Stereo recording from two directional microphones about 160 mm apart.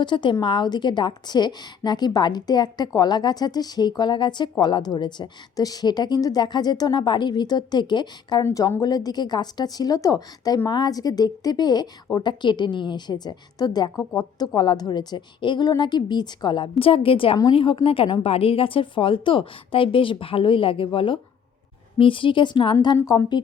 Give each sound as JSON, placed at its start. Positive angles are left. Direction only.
{"t": 0.0, "sound": "a woman's voice", "side_deg": 30}
{"t": 8.4, "sound": "a woman's voice", "side_deg": 15}
{"t": 14.0, "sound": "speech", "side_deg": 15}
{"t": 14.3, "sound": "a woman's voice", "side_deg": 25}